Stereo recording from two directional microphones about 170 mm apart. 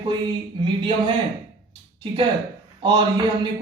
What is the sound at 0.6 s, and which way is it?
Speech, 30° right (ahead or behind).